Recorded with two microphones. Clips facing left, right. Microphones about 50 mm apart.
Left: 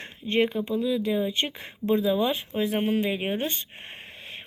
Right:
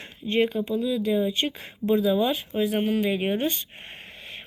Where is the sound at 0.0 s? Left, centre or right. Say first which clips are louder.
Right 1 dB; left.